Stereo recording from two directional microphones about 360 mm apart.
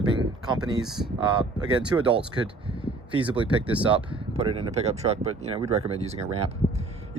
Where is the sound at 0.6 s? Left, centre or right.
Centre.